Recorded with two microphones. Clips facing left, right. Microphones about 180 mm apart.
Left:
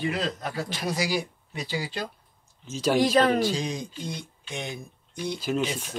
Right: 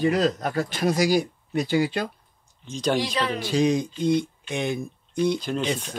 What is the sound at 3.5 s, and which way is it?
Speech, 60° right (ahead or behind).